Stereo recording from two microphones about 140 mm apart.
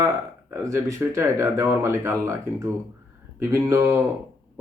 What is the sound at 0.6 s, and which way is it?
Speech, 20° right (ahead or behind).